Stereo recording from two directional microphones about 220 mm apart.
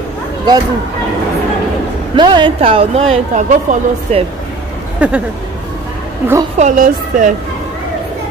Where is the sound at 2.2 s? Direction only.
20° right (ahead or behind).